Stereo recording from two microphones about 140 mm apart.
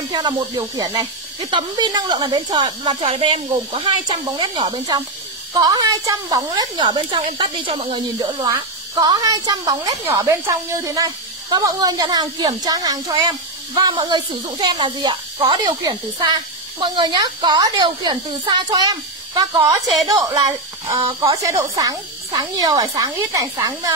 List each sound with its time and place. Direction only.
0.1 s speech: 30° right (ahead or behind)